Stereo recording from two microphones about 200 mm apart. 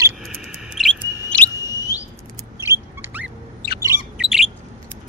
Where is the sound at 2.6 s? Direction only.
10° right (ahead or behind).